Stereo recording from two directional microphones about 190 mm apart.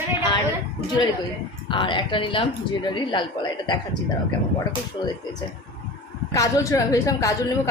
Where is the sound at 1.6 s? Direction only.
25° left (ahead or behind).